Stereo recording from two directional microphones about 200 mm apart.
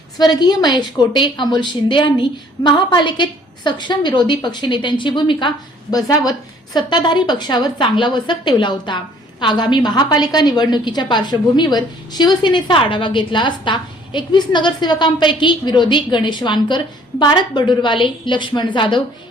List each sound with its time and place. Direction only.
0.2 s a woman's voice: 20° left (ahead or behind)